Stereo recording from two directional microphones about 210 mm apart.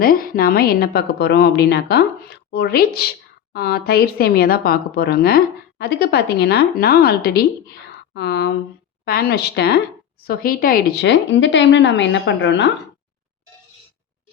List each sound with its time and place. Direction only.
0.0 s a woman's voice: 45° left (ahead or behind); by 12.7 s 60° left (ahead or behind)